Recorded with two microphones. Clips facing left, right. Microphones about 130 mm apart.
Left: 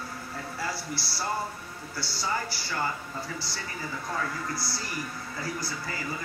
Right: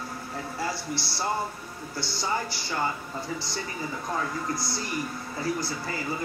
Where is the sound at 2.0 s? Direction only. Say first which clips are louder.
Right 2 dB; 20° right (ahead or behind).